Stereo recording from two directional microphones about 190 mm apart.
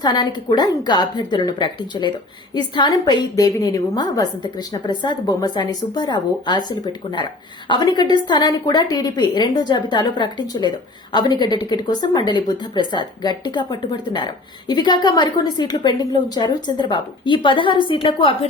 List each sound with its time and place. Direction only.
0.0 s a woman's voice: 20° left (ahead or behind)